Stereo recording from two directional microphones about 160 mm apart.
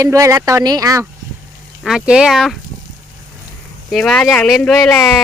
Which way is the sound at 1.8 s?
5° right (ahead or behind).